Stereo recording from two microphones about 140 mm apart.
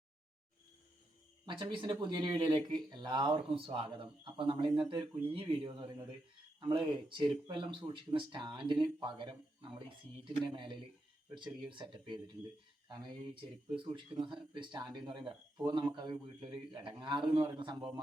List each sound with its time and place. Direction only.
1.5 s speech: 35° right (ahead or behind)